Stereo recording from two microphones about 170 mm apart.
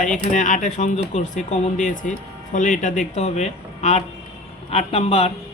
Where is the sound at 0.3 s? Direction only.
45° left (ahead or behind).